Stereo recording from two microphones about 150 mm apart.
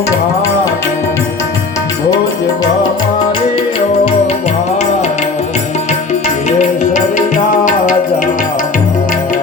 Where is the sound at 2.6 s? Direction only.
30° left (ahead or behind).